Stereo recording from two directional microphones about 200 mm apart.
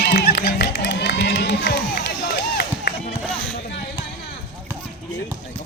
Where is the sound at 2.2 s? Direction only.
50° left (ahead or behind).